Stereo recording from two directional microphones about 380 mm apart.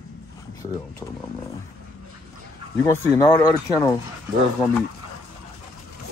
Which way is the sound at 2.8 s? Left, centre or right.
Centre.